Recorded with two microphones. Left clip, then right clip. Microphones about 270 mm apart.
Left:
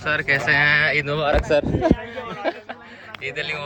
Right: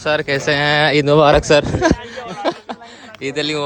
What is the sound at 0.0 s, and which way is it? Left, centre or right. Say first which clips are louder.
Speech: right 3 dB; centre.